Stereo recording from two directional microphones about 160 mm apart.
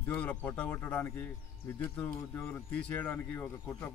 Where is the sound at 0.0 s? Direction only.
10° left (ahead or behind).